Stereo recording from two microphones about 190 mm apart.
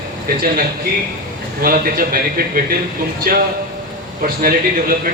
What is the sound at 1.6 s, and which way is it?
A man's voice, 50° right (ahead or behind).